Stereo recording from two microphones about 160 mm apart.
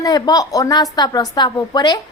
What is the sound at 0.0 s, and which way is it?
A woman's voice, 25° left (ahead or behind).